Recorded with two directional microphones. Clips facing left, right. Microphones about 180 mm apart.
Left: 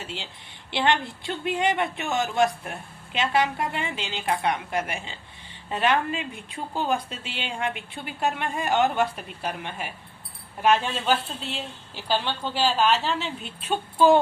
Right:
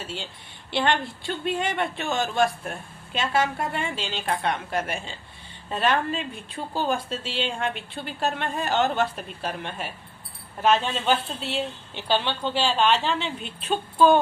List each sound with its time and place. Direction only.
0.0 s a woman's voice: 20° left (ahead or behind); by 13.7 s 5° left (ahead or behind)